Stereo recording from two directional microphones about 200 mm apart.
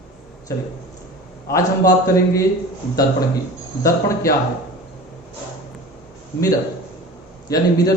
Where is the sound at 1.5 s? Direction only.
15° left (ahead or behind).